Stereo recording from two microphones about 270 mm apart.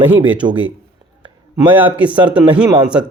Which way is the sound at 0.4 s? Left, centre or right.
Centre.